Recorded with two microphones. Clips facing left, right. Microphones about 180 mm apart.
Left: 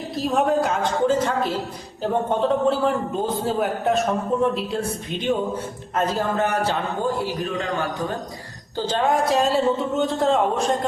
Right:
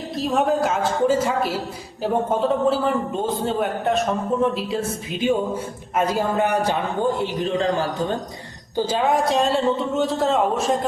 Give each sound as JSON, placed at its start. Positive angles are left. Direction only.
{"t": 0.2, "sound": "a woman's voice", "side_deg": 0}
{"t": 7.2, "sound": "a man's voice", "side_deg": -30}
{"t": 8.7, "sound": "a man's voice", "side_deg": -10}